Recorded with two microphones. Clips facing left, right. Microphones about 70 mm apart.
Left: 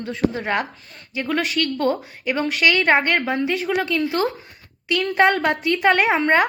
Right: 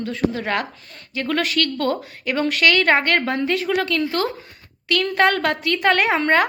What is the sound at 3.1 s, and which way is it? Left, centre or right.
A woman's voice, centre.